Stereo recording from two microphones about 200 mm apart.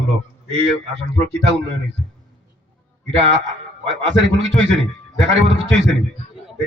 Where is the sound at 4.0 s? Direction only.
65° right (ahead or behind).